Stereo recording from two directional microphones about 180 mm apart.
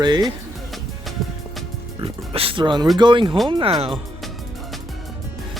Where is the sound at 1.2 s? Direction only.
Centre (ahead or behind).